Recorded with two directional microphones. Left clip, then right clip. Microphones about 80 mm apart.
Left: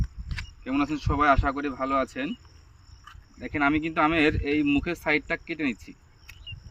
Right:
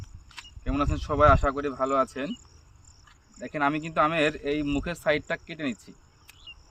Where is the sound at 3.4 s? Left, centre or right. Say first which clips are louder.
Left 2 dB; right.